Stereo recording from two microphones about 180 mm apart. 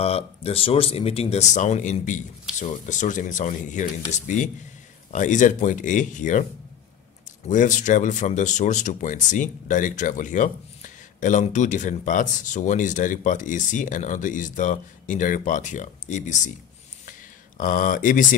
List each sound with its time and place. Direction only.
0.0 s speech: 35° left (ahead or behind)
7.4 s speech: 45° left (ahead or behind)
17.6 s speech: 45° left (ahead or behind)